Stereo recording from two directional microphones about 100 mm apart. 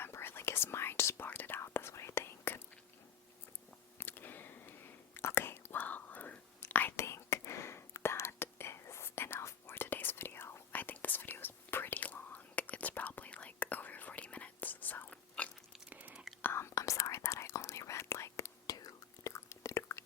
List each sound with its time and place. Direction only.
0.0 s whispering: 20° left (ahead or behind)
4.0 s a sound: 20° left (ahead or behind)
5.1 s whispering: 20° left (ahead or behind)
15.9 s whispering: 15° right (ahead or behind)
16.4 s whispering: 25° left (ahead or behind)